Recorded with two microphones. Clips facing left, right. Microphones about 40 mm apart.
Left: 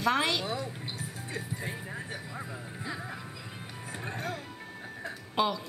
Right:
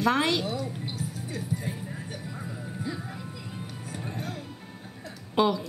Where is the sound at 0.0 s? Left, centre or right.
Centre.